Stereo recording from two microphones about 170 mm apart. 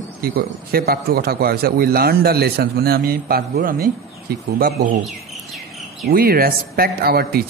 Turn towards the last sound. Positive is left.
turn(degrees=-65)  # may be behind; listen again after turning